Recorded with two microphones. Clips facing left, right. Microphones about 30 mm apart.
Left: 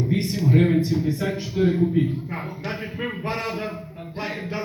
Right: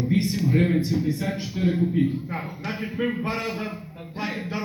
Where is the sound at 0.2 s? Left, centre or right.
Left.